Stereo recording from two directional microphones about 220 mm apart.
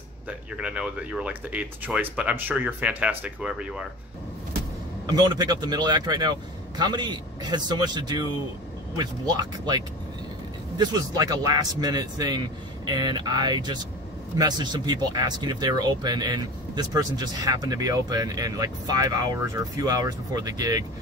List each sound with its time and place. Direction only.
0.3 s speech: 5° right (ahead or behind)
5.0 s speech: 20° right (ahead or behind)